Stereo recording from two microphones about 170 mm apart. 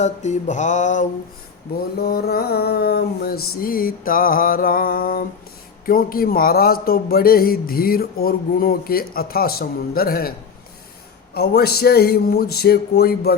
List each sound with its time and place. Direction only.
0.0 s mantra: 45° left (ahead or behind)
2.0 s a man's voice: 65° left (ahead or behind)
11.3 s a man's voice: 70° left (ahead or behind)